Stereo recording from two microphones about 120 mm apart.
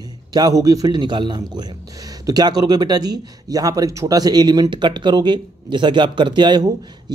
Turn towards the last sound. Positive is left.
turn(degrees=-35)  # may be behind; listen again after turning